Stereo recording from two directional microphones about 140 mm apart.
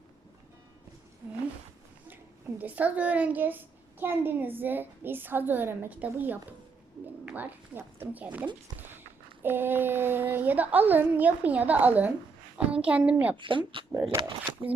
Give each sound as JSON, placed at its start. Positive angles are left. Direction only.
{"t": 2.6, "sound": "a woman's voice", "side_deg": -10}
{"t": 13.3, "sound": "speech", "side_deg": -35}